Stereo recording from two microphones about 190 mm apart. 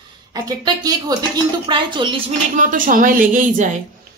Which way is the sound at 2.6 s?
45° right (ahead or behind).